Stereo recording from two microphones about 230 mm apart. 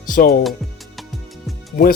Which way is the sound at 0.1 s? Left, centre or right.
Left.